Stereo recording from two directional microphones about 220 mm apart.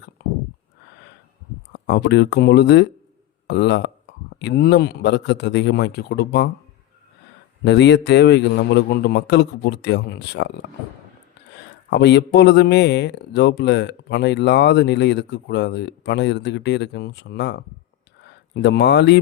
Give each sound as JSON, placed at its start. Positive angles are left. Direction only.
{"t": 1.7, "sound": "speech", "side_deg": 50}
{"t": 7.6, "sound": "speech", "side_deg": 50}
{"t": 11.9, "sound": "speech", "side_deg": 50}